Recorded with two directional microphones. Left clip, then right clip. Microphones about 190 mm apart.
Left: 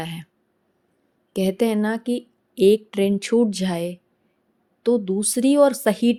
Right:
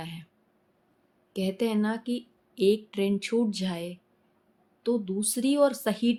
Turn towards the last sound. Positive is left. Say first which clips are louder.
# left 7 dB
turn(degrees=40)  # may be behind; listen again after turning